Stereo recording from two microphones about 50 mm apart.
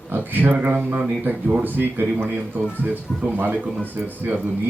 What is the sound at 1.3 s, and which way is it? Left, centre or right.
A man's voice, right.